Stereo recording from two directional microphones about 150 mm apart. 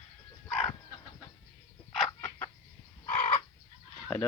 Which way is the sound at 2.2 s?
15° left (ahead or behind).